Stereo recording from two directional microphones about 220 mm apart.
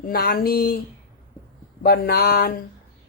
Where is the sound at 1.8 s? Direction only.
45° left (ahead or behind).